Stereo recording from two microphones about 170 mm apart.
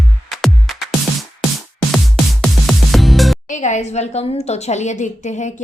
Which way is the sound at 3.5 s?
45° left (ahead or behind).